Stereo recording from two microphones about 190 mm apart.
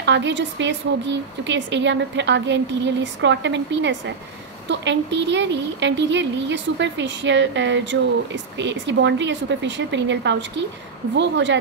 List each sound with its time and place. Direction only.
0.0 s a woman's voice: 70° right (ahead or behind)